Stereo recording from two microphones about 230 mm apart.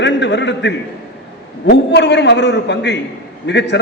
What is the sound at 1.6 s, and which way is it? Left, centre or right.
A man's voice, left.